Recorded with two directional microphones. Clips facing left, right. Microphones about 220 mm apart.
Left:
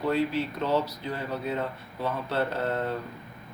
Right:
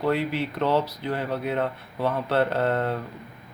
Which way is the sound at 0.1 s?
70° right (ahead or behind).